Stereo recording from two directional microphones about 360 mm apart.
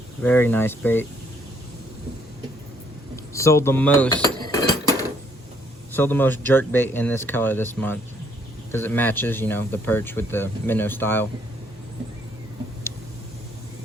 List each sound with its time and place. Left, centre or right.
0.2 s speech: centre
3.3 s speech: centre
4.4 s a sound: centre
5.9 s speech: centre